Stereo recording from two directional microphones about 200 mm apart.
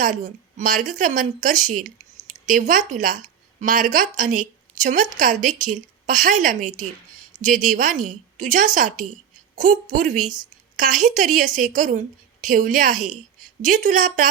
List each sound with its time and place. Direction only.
0.0 s a woman's voice: 40° right (ahead or behind)